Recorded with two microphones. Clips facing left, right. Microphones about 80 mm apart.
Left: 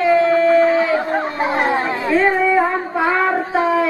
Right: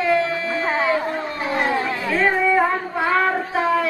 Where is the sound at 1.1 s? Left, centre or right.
Left.